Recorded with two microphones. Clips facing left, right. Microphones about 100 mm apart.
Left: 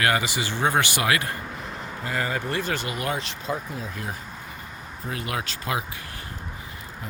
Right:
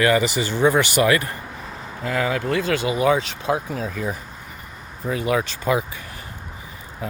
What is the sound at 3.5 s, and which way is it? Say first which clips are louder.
Speech: right 7 dB; 90° right.